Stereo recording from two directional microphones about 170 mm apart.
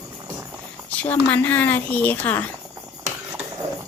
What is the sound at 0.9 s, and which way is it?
Speech, 10° left (ahead or behind).